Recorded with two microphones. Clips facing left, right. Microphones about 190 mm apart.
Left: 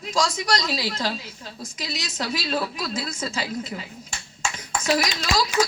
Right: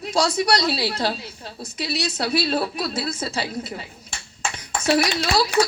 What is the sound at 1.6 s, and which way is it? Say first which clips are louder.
Speech: right 7 dB; 65° right (ahead or behind).